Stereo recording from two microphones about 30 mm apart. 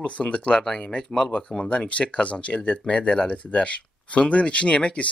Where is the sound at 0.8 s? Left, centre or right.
Left.